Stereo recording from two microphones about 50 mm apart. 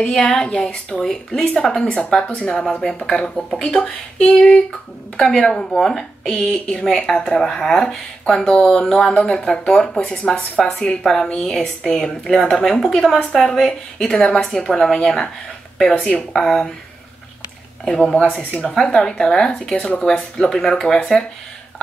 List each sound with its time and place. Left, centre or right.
0.0 s speech: centre
17.8 s speech: centre